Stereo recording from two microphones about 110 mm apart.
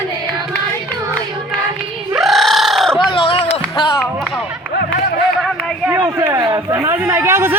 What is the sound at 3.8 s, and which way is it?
Music, 45° left (ahead or behind).